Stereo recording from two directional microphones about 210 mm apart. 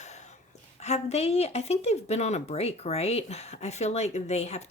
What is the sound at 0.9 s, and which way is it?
Speech, 30° left (ahead or behind).